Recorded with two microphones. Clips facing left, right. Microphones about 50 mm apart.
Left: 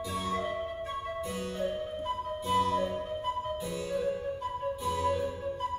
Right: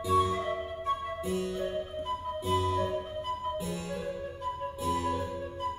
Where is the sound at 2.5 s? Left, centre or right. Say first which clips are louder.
Left 2 dB; centre.